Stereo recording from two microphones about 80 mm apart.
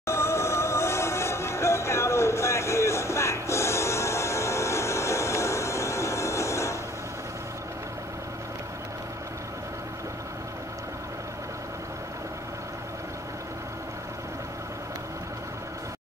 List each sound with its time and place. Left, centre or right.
0.0 s music: left